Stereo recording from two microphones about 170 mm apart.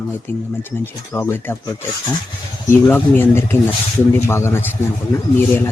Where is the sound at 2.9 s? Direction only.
15° left (ahead or behind).